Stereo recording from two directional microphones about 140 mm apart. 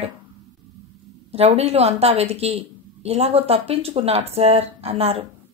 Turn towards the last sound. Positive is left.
turn(degrees=-45)  # may be behind; listen again after turning